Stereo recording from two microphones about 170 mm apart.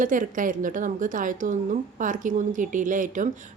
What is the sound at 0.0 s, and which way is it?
A woman's voice, 50° right (ahead or behind).